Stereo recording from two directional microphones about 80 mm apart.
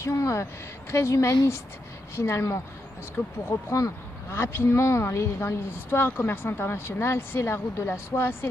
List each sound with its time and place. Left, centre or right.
0.0 s speech: left